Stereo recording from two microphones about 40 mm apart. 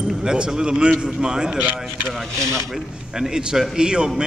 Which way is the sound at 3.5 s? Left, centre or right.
Centre.